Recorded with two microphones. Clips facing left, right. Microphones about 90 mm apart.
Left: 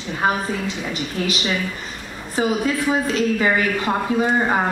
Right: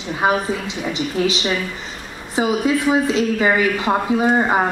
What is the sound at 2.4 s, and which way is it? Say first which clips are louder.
A woman's voice: right 2 dB; 15° right (ahead or behind).